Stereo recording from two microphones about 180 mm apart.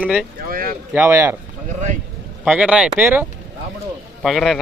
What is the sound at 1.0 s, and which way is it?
Speech, 15° right (ahead or behind).